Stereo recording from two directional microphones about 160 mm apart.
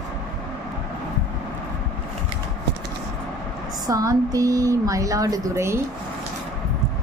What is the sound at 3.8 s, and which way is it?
Speech, 20° right (ahead or behind).